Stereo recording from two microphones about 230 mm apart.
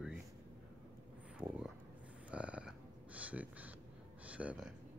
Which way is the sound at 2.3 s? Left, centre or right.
Centre.